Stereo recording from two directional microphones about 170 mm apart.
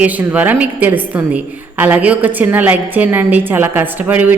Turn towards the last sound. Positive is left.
turn(degrees=-10)  # may be behind; listen again after turning